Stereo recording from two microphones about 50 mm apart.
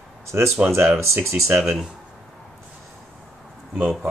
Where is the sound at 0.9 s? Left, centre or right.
Right.